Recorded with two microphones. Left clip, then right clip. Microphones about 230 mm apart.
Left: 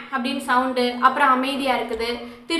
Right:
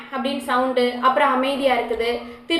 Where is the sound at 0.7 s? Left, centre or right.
Centre.